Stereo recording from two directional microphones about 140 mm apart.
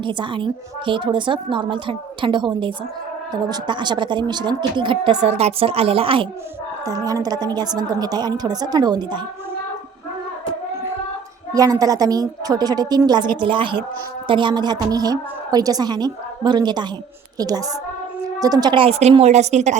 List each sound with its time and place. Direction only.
0.0 s a woman's voice: 35° right (ahead or behind)
5.2 s a woman's voice: 50° right (ahead or behind)
6.8 s a woman's voice: 25° right (ahead or behind)
11.5 s a woman's voice: 25° right (ahead or behind); by 19.7 s 55° right (ahead or behind)